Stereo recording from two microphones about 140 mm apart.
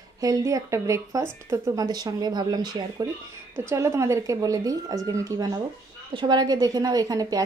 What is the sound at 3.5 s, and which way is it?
Speech, 20° right (ahead or behind).